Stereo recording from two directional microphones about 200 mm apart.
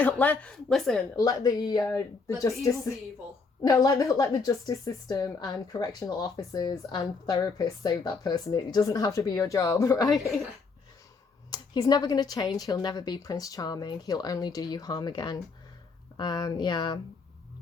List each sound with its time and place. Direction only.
0.0 s a woman's voice: 10° left (ahead or behind)
1.2 s speech: 15° left (ahead or behind)
3.6 s speech: 15° left (ahead or behind)
11.5 s speech: 20° left (ahead or behind)